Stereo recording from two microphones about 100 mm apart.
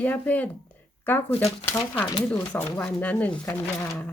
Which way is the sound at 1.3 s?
80° left.